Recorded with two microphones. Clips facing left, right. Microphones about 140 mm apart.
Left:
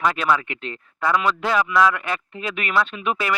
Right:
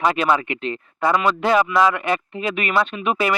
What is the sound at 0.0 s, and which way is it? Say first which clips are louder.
Speech: right 3 dB; 10° right (ahead or behind).